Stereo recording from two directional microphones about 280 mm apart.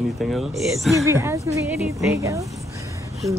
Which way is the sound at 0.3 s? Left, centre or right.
Centre.